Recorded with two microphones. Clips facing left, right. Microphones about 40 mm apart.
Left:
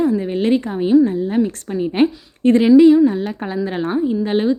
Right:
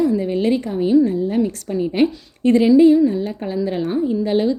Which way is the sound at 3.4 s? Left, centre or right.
Left.